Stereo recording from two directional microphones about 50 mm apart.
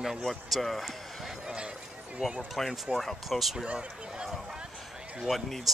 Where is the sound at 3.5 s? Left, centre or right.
Centre.